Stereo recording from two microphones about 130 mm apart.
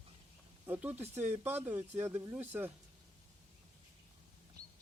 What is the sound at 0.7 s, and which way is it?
Speech, 15° right (ahead or behind).